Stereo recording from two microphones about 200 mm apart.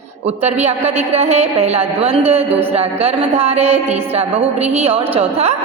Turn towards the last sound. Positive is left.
turn(degrees=-30)  # may be behind; listen again after turning